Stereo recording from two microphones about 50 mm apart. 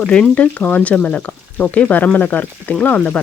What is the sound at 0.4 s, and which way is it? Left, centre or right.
Speech, left.